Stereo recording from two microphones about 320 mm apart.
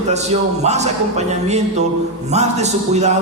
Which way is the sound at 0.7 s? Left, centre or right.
Right.